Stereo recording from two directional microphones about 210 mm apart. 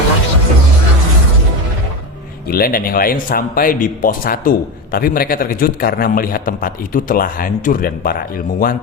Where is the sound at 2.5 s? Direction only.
45° left (ahead or behind).